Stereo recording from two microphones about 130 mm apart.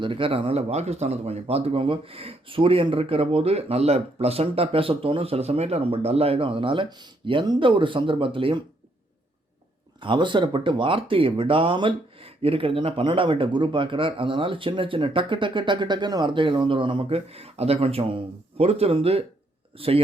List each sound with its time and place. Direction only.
0.0 s speech: 40° right (ahead or behind)
10.0 s speech: 40° right (ahead or behind)